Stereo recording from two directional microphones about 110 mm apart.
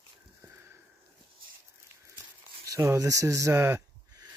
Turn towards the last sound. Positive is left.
turn(degrees=-25)  # may be behind; listen again after turning